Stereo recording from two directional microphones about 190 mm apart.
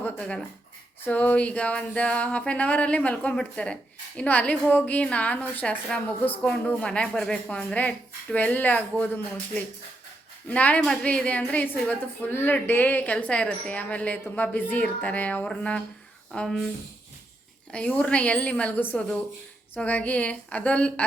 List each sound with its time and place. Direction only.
0.0 s a sound: 5° left (ahead or behind)
1.0 s a woman's voice: 10° left (ahead or behind)
10.5 s a woman's voice: 5° left (ahead or behind)
17.7 s a woman's voice: 5° left (ahead or behind)